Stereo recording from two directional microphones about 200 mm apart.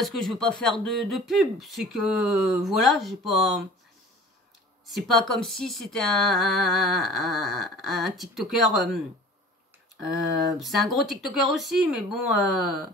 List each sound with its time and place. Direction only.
0.0 s speech: centre (ahead or behind)
4.9 s speech: centre (ahead or behind)
10.6 s speech: centre (ahead or behind)